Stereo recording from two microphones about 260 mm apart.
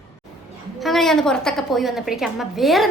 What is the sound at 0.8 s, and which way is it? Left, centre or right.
A woman's voice, centre.